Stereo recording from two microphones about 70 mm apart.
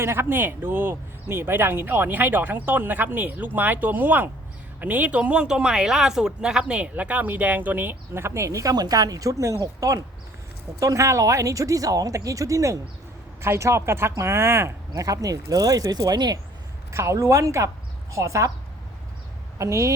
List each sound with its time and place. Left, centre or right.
0.0 s speech: right
8.7 s speech: right
15.0 s speech: right
16.9 s speech: right
19.5 s a woman's voice: right